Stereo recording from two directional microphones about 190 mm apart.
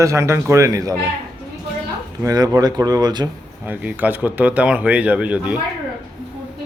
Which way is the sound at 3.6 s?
10° right (ahead or behind).